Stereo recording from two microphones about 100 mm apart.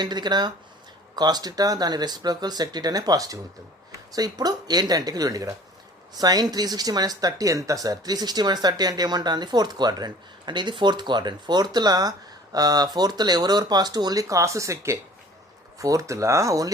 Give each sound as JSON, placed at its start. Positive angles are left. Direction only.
{"t": 0.0, "sound": "speech", "side_deg": -45}